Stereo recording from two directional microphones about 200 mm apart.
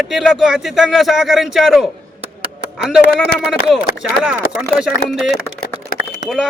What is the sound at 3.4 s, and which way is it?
Speech, 5° right (ahead or behind).